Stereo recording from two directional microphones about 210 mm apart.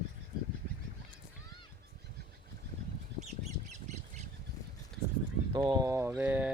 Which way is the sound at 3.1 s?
30° right (ahead or behind).